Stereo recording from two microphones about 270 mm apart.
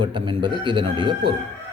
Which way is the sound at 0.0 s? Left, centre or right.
Centre.